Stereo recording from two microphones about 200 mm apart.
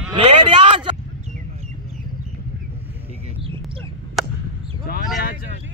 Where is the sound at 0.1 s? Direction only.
25° right (ahead or behind).